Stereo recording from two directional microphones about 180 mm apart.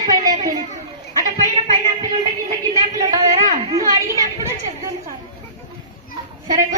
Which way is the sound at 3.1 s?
20° right (ahead or behind).